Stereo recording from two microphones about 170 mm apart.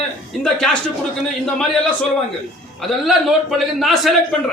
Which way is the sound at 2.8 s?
Centre (ahead or behind).